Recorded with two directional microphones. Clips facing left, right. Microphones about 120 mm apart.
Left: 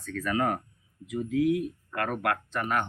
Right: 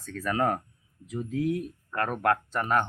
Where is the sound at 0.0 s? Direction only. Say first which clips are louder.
Right 1 dB; 35° right (ahead or behind).